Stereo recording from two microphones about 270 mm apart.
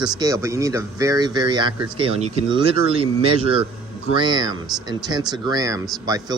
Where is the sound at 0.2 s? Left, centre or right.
Centre.